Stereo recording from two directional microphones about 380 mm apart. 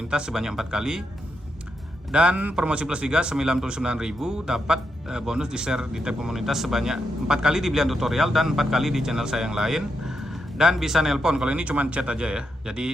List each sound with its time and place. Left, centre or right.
0.1 s a man's voice: centre
2.1 s a man's voice: centre